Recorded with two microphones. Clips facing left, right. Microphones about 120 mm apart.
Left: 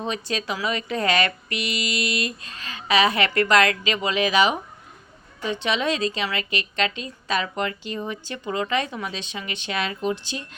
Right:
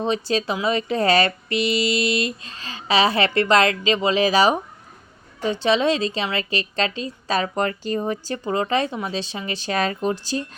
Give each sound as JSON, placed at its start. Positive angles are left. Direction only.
{"t": 0.0, "sound": "a woman's voice", "side_deg": -30}